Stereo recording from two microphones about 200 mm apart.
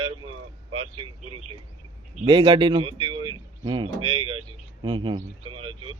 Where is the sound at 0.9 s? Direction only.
25° right (ahead or behind).